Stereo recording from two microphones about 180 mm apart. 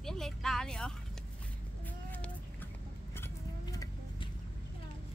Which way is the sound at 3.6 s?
20° left (ahead or behind).